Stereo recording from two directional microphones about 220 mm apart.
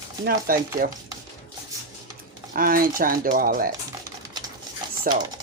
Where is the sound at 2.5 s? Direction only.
40° right (ahead or behind).